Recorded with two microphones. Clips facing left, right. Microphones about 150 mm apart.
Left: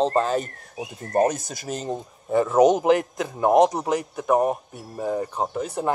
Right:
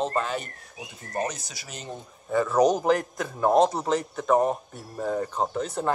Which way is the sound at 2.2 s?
25° left (ahead or behind).